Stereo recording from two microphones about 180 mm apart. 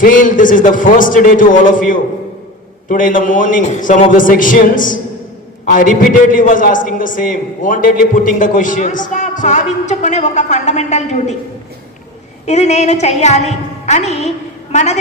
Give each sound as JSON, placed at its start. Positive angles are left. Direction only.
{"t": 0.0, "sound": "a man's voice", "side_deg": 50}
{"t": 12.5, "sound": "a woman's voice", "side_deg": 40}